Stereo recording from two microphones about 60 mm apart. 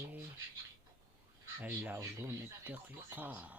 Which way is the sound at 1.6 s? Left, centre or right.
Right.